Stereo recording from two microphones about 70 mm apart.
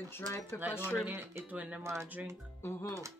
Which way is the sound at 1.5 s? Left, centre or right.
Centre.